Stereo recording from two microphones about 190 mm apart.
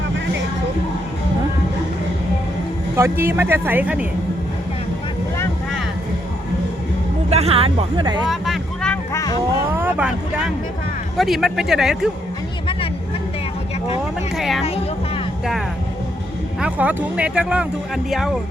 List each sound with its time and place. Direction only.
2.9 s speech: 15° right (ahead or behind)
7.3 s speech: 35° right (ahead or behind)
8.3 s vehicle: centre (ahead or behind)
9.1 s a sound: 20° left (ahead or behind)
9.7 s speech: 10° right (ahead or behind)
14.3 s speech: centre (ahead or behind)
16.6 s speech: 5° right (ahead or behind)